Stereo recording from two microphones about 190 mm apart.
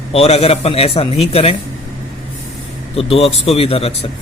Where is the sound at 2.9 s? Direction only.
30° left (ahead or behind).